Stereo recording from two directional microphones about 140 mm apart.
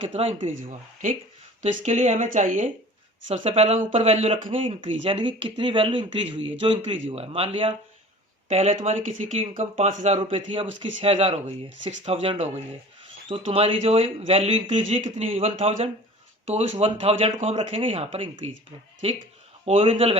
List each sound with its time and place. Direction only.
0.1 s speech: 45° right (ahead or behind); by 2.6 s 65° right (ahead or behind)
3.2 s speech: 45° right (ahead or behind)
10.2 s speech: 40° right (ahead or behind)